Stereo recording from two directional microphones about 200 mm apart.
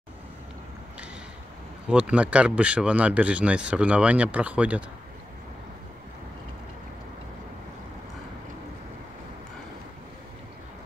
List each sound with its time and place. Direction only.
1.9 s speech: 5° right (ahead or behind)